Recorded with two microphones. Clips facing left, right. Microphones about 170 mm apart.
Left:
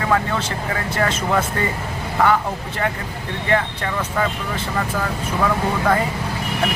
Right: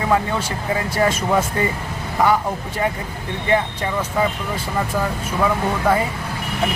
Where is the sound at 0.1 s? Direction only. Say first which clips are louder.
Right 1 dB; 15° right (ahead or behind).